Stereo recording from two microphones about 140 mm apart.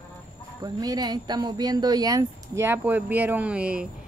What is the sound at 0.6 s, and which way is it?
Speech, 25° right (ahead or behind).